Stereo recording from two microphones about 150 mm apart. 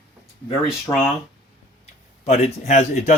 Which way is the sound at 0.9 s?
25° left (ahead or behind).